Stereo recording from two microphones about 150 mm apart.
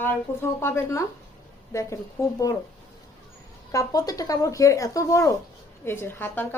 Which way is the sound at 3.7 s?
25° left (ahead or behind).